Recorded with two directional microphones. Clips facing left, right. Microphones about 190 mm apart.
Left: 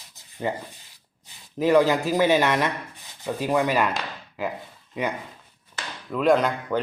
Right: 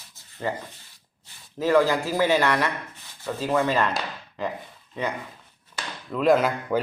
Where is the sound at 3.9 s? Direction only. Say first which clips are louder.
Right 1 dB; 5° left (ahead or behind).